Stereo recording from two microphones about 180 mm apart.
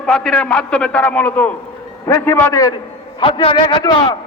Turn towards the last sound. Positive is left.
turn(degrees=25)  # may be behind; listen again after turning